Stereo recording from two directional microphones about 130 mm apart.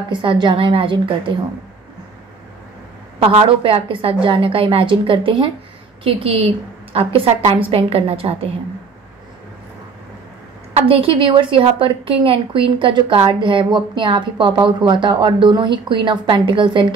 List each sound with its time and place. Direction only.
0.1 s a woman's voice: 40° right (ahead or behind)
3.2 s a woman's voice: 45° right (ahead or behind)
10.9 s a woman's voice: 45° right (ahead or behind)